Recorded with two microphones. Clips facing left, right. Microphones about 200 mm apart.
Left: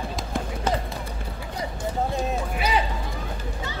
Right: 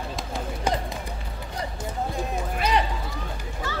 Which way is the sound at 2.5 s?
5° left (ahead or behind).